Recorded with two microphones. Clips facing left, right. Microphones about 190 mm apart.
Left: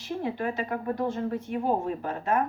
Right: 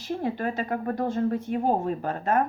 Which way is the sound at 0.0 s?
45° right (ahead or behind).